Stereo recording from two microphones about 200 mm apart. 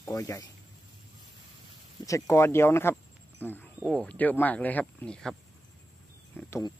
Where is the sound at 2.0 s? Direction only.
15° left (ahead or behind).